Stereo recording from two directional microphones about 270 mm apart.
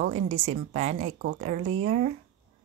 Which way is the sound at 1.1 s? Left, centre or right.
Right.